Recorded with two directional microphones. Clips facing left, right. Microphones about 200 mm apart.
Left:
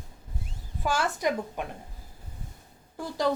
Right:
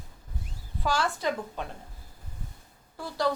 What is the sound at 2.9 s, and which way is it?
Speech, 15° left (ahead or behind).